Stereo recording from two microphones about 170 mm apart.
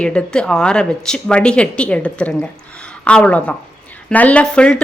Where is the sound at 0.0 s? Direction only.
5° left (ahead or behind).